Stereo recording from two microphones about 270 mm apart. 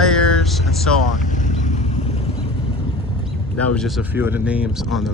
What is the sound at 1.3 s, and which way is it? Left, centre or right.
Vehicle, left.